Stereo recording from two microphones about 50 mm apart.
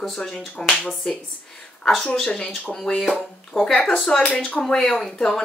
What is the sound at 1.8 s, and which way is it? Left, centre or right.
A woman's voice, centre.